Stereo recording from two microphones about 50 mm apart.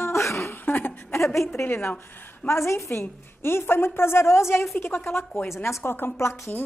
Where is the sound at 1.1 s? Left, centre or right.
Left.